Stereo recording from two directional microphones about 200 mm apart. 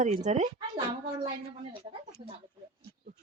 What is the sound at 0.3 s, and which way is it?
Speech, 35° right (ahead or behind).